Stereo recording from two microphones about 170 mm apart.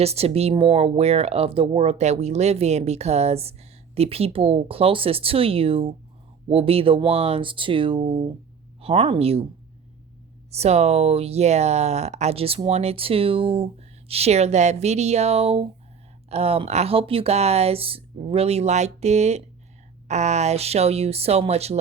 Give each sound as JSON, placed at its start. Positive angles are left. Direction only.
{"t": 0.0, "sound": "speech", "side_deg": -35}
{"t": 10.5, "sound": "speech", "side_deg": -40}